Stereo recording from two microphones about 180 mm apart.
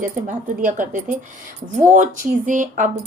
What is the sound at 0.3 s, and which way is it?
A woman's voice, 45° right (ahead or behind).